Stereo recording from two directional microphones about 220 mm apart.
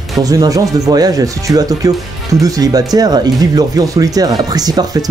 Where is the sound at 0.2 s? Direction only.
15° right (ahead or behind).